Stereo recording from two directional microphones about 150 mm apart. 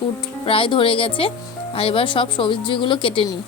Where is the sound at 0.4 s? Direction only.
35° left (ahead or behind).